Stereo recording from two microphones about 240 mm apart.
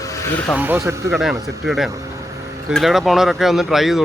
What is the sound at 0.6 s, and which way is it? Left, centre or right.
Speech, centre.